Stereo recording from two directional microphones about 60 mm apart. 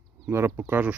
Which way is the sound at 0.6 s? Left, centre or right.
Right.